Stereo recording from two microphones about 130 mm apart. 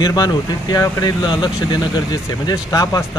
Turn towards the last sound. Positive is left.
turn(degrees=25)  # may be behind; listen again after turning